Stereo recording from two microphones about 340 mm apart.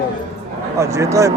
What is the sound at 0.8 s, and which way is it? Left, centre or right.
Speech, centre.